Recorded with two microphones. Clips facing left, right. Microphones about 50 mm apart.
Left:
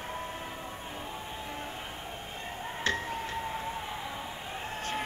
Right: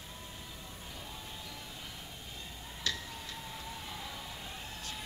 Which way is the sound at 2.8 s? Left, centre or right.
Left.